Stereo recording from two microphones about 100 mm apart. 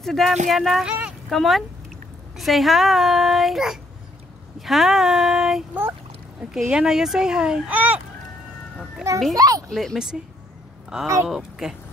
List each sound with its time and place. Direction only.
0.0 s a child's voice: 5° left (ahead or behind)
0.8 s a sound: 10° right (ahead or behind)
1.3 s a child's voice: centre (ahead or behind); by 8.0 s 15° right (ahead or behind)
9.3 s a child's voice: 35° right (ahead or behind)
9.7 s a child's voice: centre (ahead or behind)